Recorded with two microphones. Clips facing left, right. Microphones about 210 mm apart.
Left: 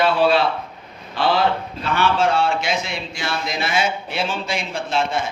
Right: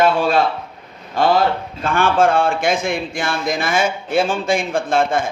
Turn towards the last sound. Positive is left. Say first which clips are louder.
# right 5 dB
turn(degrees=-50)  # may be behind; listen again after turning